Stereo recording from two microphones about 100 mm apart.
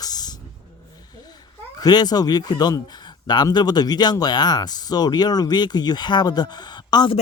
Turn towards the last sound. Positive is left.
turn(degrees=45)  # may be behind; listen again after turning